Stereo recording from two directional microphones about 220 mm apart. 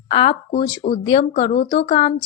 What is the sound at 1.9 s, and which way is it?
Speech, 20° left (ahead or behind).